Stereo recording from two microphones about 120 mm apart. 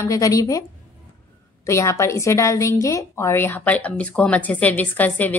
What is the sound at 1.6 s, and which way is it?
A woman's voice, 25° left (ahead or behind).